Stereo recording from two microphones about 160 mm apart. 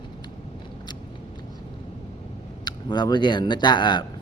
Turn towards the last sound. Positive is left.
turn(degrees=30)  # may be behind; listen again after turning